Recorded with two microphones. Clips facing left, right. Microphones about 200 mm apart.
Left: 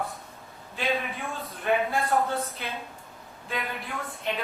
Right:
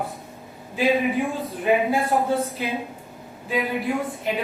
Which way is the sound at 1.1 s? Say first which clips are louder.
Right 11 dB; 15° right (ahead or behind).